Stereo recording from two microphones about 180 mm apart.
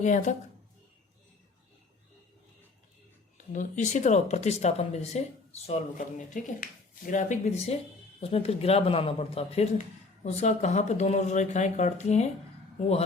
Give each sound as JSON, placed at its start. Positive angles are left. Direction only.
{"t": 0.0, "sound": "a woman's voice", "side_deg": 45}
{"t": 3.3, "sound": "speech", "side_deg": 45}